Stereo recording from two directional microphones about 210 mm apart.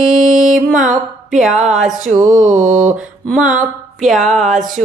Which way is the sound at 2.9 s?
Centre (ahead or behind).